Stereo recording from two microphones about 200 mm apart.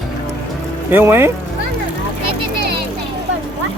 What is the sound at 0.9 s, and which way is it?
Speech, 10° right (ahead or behind).